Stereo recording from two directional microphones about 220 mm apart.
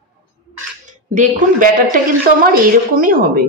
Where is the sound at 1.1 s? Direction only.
35° right (ahead or behind).